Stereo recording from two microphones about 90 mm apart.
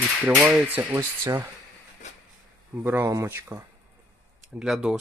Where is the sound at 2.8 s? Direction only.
25° right (ahead or behind).